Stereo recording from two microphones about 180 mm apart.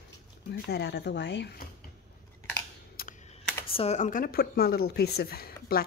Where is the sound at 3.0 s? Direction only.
55° left (ahead or behind).